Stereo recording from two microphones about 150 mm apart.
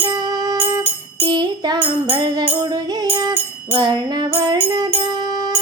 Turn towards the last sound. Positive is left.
turn(degrees=-30)  # may be behind; listen again after turning